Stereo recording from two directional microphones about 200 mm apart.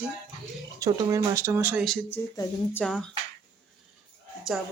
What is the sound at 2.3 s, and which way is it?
Speech, 15° left (ahead or behind).